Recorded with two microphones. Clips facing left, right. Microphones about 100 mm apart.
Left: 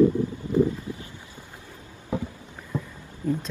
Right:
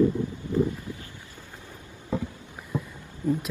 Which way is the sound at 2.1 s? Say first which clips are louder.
Even; 15° left (ahead or behind).